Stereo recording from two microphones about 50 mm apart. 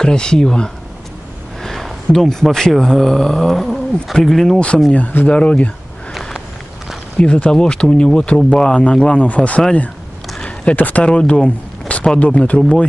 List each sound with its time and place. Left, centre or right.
0.0 s speech: centre
1.6 s a sound: centre
2.8 s speech: centre
4.9 s speech: left
5.3 s speech: left
7.2 s speech: left
9.3 s speech: left
10.4 s a sound: left
10.8 s speech: left
11.1 s speech: left